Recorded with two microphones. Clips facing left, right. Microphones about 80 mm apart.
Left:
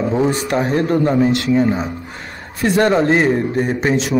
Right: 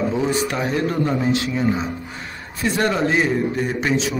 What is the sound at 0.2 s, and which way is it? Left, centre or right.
A man's voice, left.